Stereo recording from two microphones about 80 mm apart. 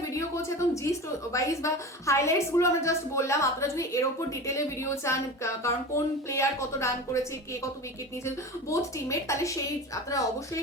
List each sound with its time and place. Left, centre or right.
0.0 s a woman's voice: left
8.7 s a woman's voice: left